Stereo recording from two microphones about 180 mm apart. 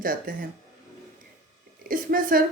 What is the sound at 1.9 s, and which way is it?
Speech, 50° right (ahead or behind).